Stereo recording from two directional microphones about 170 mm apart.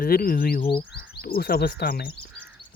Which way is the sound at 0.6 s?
30° left (ahead or behind).